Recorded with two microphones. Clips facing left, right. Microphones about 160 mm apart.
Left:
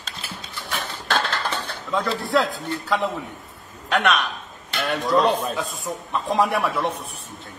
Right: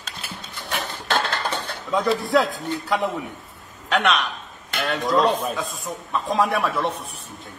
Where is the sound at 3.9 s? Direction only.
Centre (ahead or behind).